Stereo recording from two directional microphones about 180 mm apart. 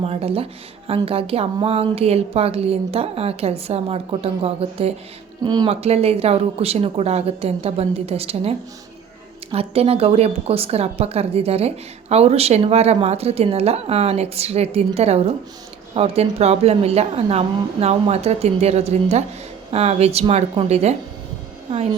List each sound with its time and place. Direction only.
0.0 s speech: 35° right (ahead or behind)